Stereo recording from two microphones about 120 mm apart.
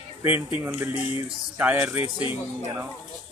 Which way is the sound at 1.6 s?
15° right (ahead or behind).